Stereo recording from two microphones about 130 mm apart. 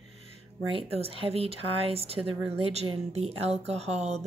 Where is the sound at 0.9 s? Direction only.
45° right (ahead or behind).